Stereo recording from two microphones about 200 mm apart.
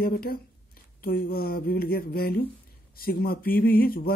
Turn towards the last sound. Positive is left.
turn(degrees=45)  # may be behind; listen again after turning